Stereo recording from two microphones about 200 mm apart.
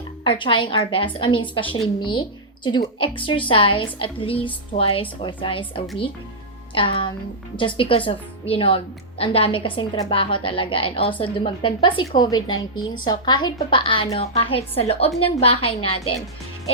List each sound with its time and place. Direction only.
0.3 s a woman's voice: 25° left (ahead or behind)